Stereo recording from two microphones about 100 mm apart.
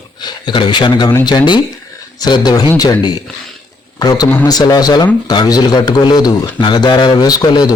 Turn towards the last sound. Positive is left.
turn(degrees=40)  # may be behind; listen again after turning